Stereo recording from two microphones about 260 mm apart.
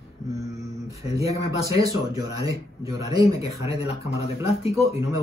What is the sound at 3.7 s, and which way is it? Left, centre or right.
Speech, left.